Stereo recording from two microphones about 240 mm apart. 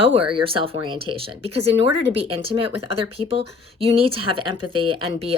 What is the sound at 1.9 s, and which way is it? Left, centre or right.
Speech, left.